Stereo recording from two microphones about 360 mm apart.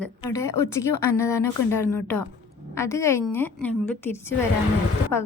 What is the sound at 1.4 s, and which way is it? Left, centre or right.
Speech, left.